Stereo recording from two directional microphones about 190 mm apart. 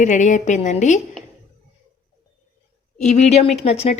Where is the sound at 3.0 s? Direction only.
40° left (ahead or behind).